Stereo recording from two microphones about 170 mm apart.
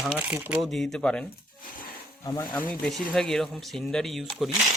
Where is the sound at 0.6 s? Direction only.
Centre (ahead or behind).